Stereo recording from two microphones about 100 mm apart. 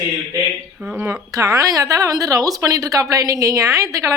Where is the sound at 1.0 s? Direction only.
25° right (ahead or behind).